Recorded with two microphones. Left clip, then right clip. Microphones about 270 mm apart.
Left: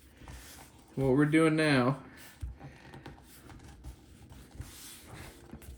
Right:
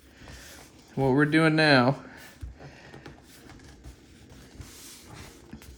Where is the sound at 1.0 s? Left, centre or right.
Right.